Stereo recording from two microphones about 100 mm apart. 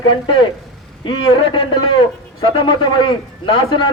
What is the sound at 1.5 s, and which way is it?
A man's voice, 55° left (ahead or behind).